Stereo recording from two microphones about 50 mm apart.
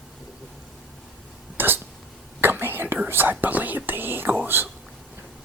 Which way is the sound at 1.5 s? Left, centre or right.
Right.